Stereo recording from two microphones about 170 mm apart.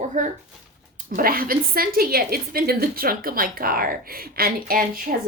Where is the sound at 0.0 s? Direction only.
45° right (ahead or behind).